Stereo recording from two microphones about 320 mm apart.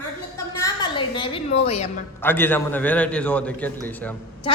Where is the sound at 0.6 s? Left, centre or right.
Centre.